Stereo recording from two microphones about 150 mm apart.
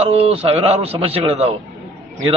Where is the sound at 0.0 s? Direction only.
40° right (ahead or behind).